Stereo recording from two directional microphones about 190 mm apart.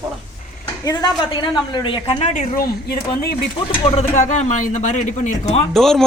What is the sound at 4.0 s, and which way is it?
A man's voice, 40° left (ahead or behind).